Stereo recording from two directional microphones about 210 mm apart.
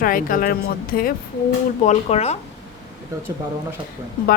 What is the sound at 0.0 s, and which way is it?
A woman's voice, 40° left (ahead or behind).